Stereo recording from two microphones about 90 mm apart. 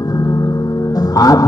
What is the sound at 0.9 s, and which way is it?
Music, 45° left (ahead or behind).